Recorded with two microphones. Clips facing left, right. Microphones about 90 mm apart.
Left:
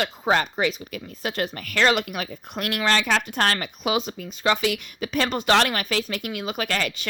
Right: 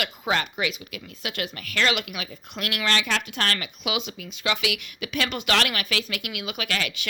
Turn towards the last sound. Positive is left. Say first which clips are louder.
# left 3 dB
turn(degrees=40)  # may be behind; listen again after turning